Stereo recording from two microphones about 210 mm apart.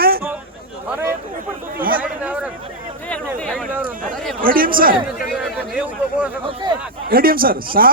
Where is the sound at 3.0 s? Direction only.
5° left (ahead or behind).